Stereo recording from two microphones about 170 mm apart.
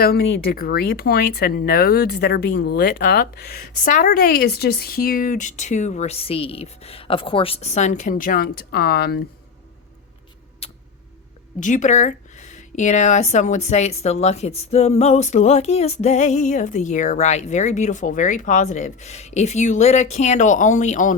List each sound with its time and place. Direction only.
0.0 s speech: 75° left (ahead or behind)
10.6 s a sound: 35° left (ahead or behind)
11.6 s a woman's voice: 45° left (ahead or behind)